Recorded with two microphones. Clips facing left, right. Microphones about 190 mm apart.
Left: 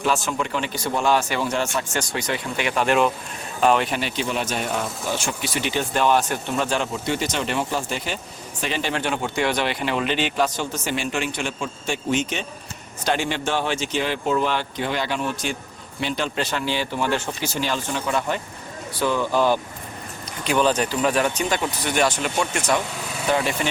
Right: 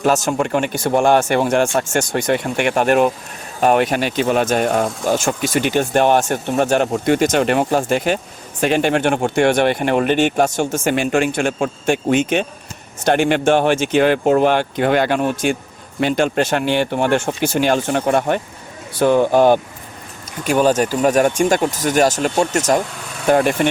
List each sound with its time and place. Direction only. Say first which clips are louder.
0.0 s speech: right 7 dB; 45° right (ahead or behind)
20.4 s speech: right 5 dB; 45° right (ahead or behind)
23.3 s speech: right 8 dB; 55° right (ahead or behind)